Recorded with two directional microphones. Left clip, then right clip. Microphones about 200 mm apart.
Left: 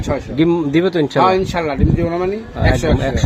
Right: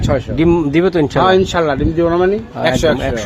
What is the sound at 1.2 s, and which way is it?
Speech, 40° right (ahead or behind).